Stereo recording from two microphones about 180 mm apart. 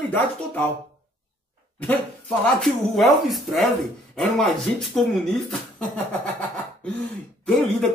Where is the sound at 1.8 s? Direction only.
5° left (ahead or behind).